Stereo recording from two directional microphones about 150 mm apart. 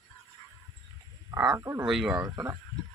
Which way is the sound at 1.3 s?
20° right (ahead or behind).